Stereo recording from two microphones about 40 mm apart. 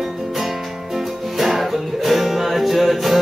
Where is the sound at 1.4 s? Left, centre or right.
Centre.